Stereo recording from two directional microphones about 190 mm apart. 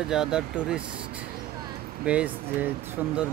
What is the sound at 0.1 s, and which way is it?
Speech, 5° right (ahead or behind).